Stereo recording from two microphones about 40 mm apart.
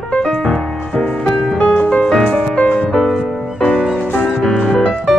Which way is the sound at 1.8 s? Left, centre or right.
Left.